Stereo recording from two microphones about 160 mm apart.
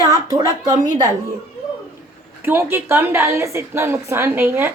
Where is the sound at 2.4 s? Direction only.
15° right (ahead or behind).